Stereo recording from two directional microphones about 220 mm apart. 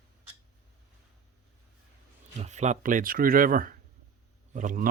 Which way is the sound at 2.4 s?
30° right (ahead or behind).